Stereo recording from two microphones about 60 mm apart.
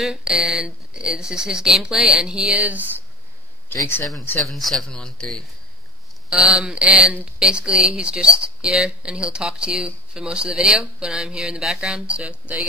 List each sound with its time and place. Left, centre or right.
0.0 s speech: centre
3.6 s speech: left
4.5 s speech: centre
4.8 s speech: centre
6.3 s speech: centre